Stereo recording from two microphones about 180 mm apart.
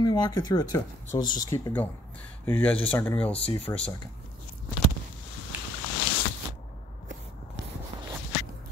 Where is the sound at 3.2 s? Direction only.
30° left (ahead or behind).